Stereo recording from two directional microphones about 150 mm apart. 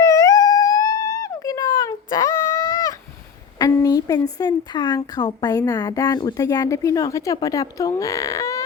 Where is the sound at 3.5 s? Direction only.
25° left (ahead or behind).